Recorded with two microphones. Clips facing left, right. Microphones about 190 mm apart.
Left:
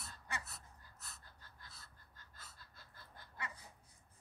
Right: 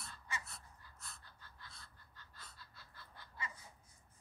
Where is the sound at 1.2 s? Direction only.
45° left (ahead or behind).